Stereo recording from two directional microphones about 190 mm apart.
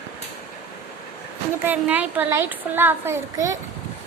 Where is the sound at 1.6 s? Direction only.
10° right (ahead or behind).